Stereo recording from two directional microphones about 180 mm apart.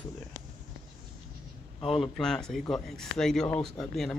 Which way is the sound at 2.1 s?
5° left (ahead or behind).